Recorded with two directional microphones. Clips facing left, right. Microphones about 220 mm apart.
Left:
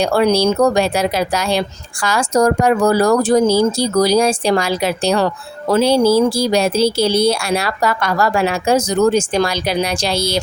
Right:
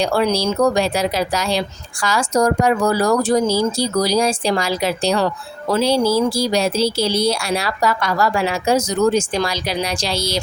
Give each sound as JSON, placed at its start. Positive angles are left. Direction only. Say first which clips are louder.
{"t": 0.0, "sound": "speech", "louder": "left 4 dB", "side_deg": 55}